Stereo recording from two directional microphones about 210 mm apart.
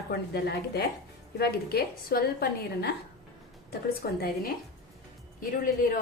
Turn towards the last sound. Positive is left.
turn(degrees=40)  # may be behind; listen again after turning